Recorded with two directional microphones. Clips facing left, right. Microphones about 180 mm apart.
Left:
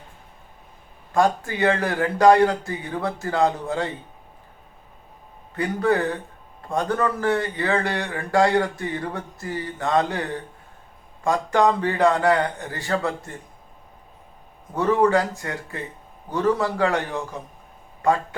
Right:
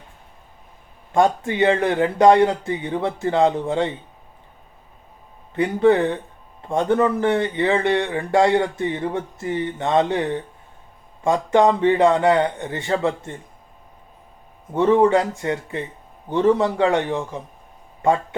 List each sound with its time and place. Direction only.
1.1 s speech: 25° right (ahead or behind)
5.5 s speech: 25° right (ahead or behind)
14.7 s a man's voice: 20° right (ahead or behind)